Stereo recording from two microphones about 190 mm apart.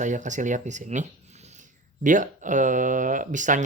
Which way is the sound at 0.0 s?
40° right (ahead or behind).